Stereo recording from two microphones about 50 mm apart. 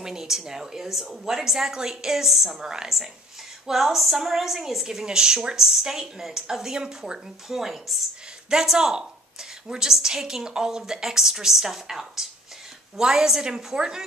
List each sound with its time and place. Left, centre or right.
0.0 s a woman's voice: centre